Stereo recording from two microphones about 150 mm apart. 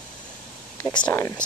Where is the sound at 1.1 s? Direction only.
25° left (ahead or behind).